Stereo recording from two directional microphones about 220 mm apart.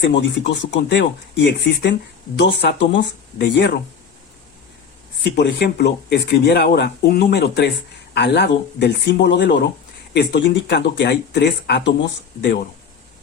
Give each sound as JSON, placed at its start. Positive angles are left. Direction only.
{"t": 0.0, "sound": "speech", "side_deg": 55}
{"t": 5.2, "sound": "speech", "side_deg": 50}